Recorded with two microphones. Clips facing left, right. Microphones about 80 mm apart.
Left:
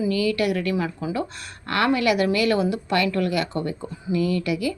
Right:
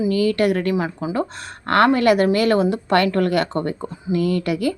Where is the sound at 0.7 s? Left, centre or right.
Right.